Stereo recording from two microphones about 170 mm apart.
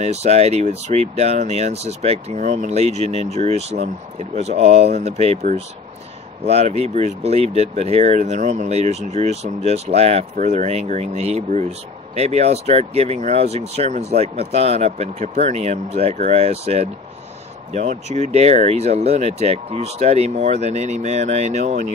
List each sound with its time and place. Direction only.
0.0 s speech: 40° right (ahead or behind)